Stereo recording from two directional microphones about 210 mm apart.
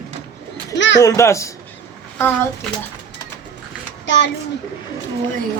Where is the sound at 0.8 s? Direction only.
60° left (ahead or behind).